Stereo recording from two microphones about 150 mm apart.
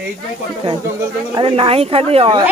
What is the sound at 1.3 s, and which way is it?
A woman's voice, 40° right (ahead or behind).